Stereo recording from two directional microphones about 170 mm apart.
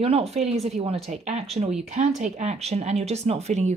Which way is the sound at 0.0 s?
35° right (ahead or behind).